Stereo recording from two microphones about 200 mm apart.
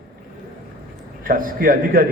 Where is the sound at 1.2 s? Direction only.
45° right (ahead or behind).